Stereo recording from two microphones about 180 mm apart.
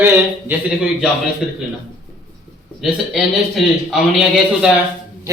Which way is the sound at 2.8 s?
Centre (ahead or behind).